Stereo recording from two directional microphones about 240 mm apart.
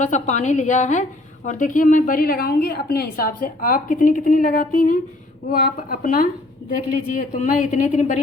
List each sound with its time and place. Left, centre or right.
0.0 s a woman's voice: left